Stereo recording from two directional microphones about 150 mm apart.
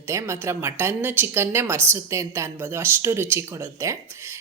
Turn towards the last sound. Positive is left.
turn(degrees=-20)  # may be behind; listen again after turning